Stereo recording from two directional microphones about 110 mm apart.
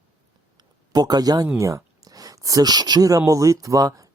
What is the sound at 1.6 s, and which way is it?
Speech, 30° right (ahead or behind).